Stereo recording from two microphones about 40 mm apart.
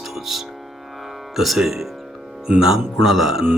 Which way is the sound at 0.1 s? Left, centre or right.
Centre.